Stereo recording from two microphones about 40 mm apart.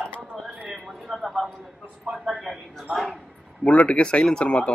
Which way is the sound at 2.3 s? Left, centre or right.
Centre.